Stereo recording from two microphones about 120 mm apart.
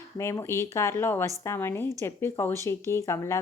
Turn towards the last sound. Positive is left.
turn(degrees=25)  # may be behind; listen again after turning